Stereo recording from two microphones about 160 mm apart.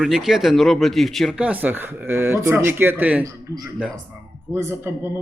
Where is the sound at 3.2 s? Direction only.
20° right (ahead or behind).